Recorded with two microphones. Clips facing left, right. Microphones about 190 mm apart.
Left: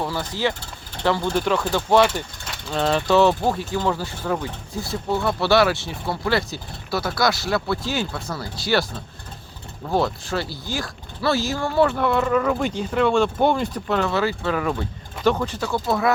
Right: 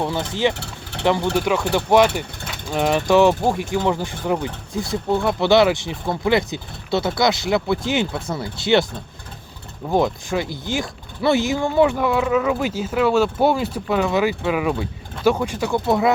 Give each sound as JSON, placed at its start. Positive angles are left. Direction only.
{"t": 0.0, "sound": "speech", "side_deg": -25}
{"t": 9.9, "sound": "speech", "side_deg": -15}